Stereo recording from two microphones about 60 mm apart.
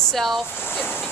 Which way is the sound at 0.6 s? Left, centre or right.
Left.